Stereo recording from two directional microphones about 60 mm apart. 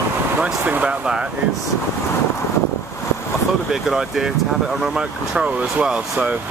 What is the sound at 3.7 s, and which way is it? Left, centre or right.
Speech, centre.